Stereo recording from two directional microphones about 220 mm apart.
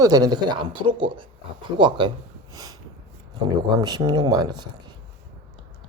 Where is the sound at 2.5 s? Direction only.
15° right (ahead or behind).